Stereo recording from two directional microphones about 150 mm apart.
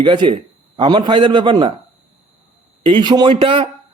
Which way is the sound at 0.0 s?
30° right (ahead or behind).